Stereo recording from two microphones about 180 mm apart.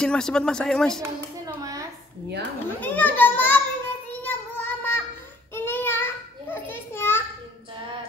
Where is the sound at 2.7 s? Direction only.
10° left (ahead or behind).